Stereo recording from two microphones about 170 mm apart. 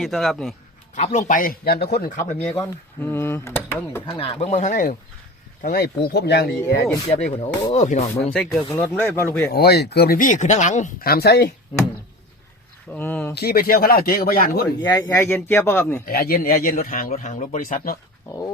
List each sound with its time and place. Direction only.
0.0 s a man's voice: centre (ahead or behind)
0.9 s speech: 45° left (ahead or behind); by 2.0 s 70° left (ahead or behind)
2.4 s speech: 5° left (ahead or behind)
4.0 s speech: 30° left (ahead or behind); by 4.9 s 50° left (ahead or behind)
5.6 s speech: 65° left (ahead or behind)
7.1 s speech: 35° left (ahead or behind)
8.2 s speech: 5° left (ahead or behind)
9.5 s speech: 70° left (ahead or behind)
12.9 s speech: 10° left (ahead or behind)
13.3 s speech: 65° left (ahead or behind)
14.8 s speech: 20° left (ahead or behind)
15.1 s speech: 10° left (ahead or behind)
16.0 s speech: 60° left (ahead or behind)